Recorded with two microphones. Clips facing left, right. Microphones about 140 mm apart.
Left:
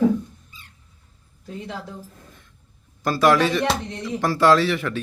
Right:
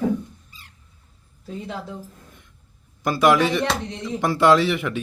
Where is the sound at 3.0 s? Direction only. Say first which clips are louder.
Even; 20° right (ahead or behind).